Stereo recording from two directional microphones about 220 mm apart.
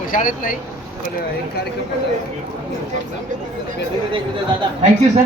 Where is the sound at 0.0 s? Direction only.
40° left (ahead or behind).